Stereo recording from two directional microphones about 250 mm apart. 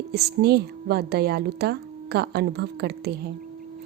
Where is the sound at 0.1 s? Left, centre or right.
Right.